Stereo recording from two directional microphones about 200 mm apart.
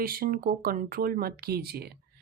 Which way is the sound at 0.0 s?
50° right (ahead or behind).